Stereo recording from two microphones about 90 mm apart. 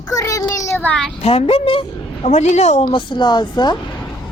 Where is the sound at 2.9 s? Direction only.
60° left (ahead or behind).